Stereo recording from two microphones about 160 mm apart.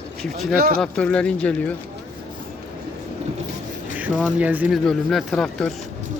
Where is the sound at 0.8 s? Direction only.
5° left (ahead or behind).